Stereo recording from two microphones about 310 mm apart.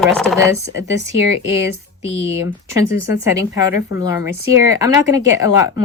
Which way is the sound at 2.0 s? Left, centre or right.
Centre.